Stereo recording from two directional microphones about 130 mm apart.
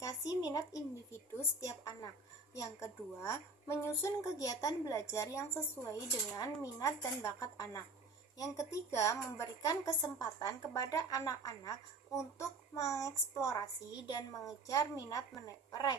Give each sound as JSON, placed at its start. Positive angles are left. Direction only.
{"t": 0.0, "sound": "a woman's voice", "side_deg": 30}
{"t": 14.7, "sound": "a woman's voice", "side_deg": 25}